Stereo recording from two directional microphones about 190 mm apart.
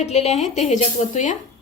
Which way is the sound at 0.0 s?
35° left (ahead or behind).